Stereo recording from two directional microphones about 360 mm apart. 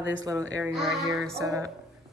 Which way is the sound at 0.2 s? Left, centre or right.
Centre.